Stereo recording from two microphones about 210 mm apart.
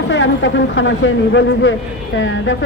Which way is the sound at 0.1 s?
60° left (ahead or behind).